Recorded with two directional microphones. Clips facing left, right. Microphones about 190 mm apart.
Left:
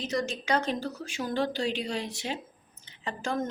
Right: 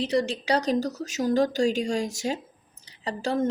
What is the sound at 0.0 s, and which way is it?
A woman's voice, 30° right (ahead or behind).